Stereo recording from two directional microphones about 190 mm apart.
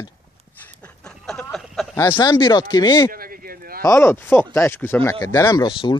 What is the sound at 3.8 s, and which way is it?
Speech, 15° left (ahead or behind).